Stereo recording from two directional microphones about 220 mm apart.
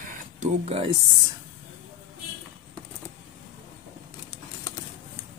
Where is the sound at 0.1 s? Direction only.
30° right (ahead or behind).